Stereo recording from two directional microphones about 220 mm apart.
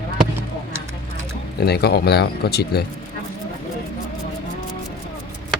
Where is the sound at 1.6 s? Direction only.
45° left (ahead or behind).